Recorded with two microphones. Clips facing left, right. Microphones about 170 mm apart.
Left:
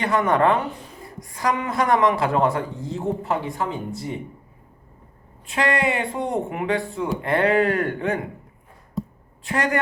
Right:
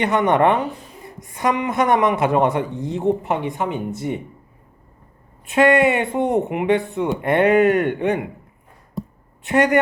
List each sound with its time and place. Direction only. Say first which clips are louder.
0.0 s speech: right 3 dB; 20° right (ahead or behind)
5.5 s speech: right 7 dB; 20° right (ahead or behind)
9.4 s speech: right 7 dB; 20° right (ahead or behind)